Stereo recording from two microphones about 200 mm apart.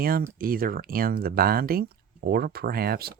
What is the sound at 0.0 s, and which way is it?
Speech, 50° right (ahead or behind).